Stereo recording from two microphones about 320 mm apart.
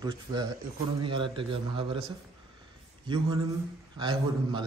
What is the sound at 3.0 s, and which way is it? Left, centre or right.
A man's voice, centre.